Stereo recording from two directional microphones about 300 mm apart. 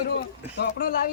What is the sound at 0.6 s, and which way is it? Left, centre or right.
Speech, left.